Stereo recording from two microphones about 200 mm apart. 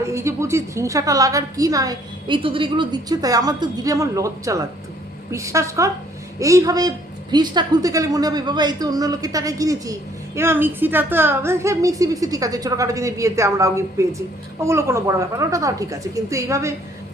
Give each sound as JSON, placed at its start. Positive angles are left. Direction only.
{"t": 0.0, "sound": "a woman's voice", "side_deg": -15}